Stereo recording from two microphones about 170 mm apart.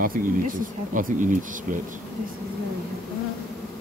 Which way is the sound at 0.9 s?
50° right (ahead or behind).